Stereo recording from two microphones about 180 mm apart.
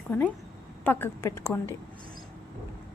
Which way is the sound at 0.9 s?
10° left (ahead or behind).